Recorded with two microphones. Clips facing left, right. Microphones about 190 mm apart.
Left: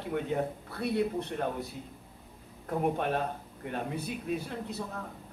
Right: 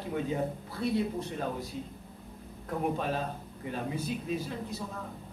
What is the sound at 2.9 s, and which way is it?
Speech, 60° left (ahead or behind).